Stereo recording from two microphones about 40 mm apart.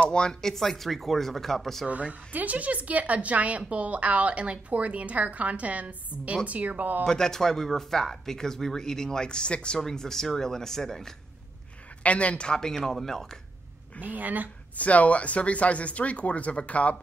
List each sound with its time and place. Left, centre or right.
0.0 s speech: left
0.3 s speech: centre
1.9 s speech: right
7.1 s speech: centre
9.8 s speech: centre
12.0 s speech: left
12.4 s speech: centre
14.0 s speech: right
14.8 s speech: left